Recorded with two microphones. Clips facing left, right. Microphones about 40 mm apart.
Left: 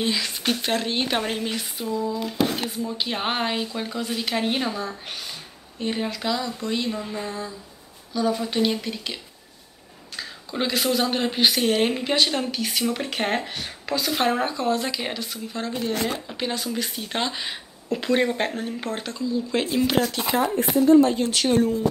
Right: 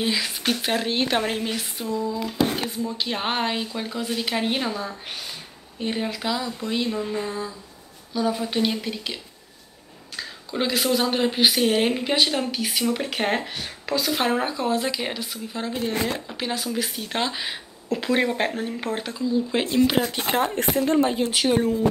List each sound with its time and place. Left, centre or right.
0.0 s speech: centre
15.8 s speech: right
16.3 s speech: centre
19.7 s speech: centre
20.0 s speech: right
20.2 s speech: right
21.0 s speech: centre